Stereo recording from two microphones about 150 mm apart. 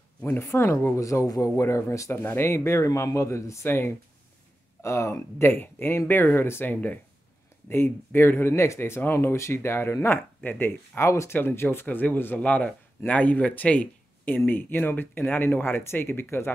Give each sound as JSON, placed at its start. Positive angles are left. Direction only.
{"t": 0.2, "sound": "speech", "side_deg": 15}